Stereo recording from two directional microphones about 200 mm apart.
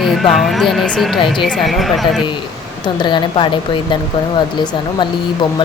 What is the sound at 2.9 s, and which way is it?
Speech, 25° left (ahead or behind).